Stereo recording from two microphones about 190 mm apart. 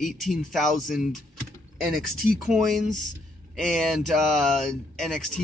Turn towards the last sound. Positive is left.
turn(degrees=0)  # may be behind; listen again after turning